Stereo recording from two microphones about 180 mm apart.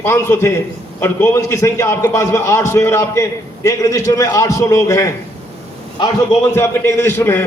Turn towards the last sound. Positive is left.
turn(degrees=15)  # may be behind; listen again after turning